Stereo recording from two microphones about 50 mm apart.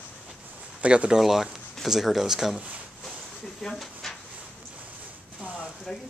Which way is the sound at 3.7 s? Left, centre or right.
Centre.